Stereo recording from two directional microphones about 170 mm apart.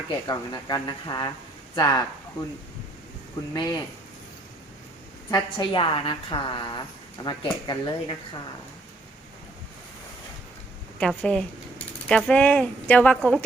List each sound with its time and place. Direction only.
0.1 s a woman's voice: 25° left (ahead or behind)
3.5 s a woman's voice: 25° left (ahead or behind)
5.3 s a woman's voice: 25° left (ahead or behind)
11.0 s a woman's voice: 5° left (ahead or behind)